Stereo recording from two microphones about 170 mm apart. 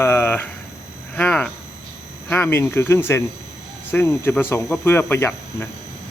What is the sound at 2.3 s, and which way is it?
Speech, 15° left (ahead or behind).